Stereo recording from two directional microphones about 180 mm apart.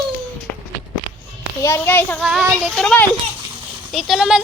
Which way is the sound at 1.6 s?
15° left (ahead or behind).